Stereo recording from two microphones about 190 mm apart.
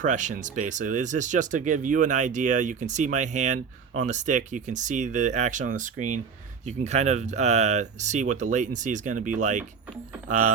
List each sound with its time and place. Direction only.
0.0 s speech: 40° right (ahead or behind)